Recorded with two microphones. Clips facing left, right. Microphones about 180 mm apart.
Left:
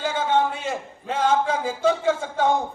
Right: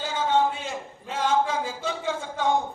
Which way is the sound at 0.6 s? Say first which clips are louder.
Left 5 dB; 55° left (ahead or behind).